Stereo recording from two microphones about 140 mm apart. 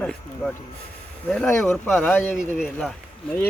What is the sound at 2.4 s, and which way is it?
Speech, 5° right (ahead or behind).